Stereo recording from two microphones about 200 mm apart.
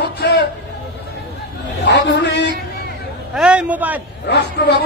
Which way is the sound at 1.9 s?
60° left (ahead or behind).